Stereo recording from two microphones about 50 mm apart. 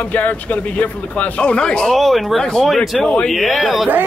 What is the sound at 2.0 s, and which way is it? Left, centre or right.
A man's voice, centre.